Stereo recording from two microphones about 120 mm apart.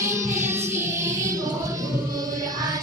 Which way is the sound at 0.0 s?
25° right (ahead or behind).